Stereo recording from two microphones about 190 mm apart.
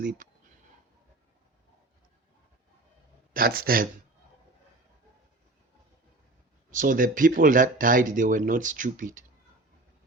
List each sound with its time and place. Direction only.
3.3 s speech: 50° right (ahead or behind)
6.7 s speech: 45° right (ahead or behind)